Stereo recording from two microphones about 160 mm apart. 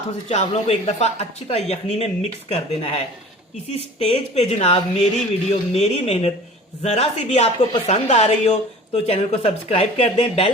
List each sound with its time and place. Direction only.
0.3 s speech: 40° left (ahead or behind)
4.0 s speech: 40° left (ahead or behind)